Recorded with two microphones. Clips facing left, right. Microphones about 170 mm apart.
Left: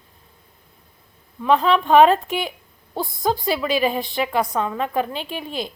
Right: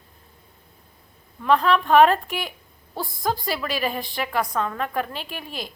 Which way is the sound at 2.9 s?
25° left (ahead or behind).